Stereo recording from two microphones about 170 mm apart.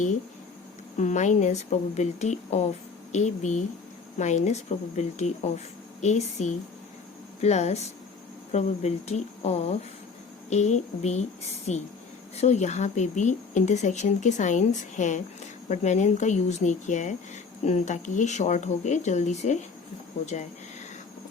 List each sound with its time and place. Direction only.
0.9 s a woman's voice: 45° left (ahead or behind)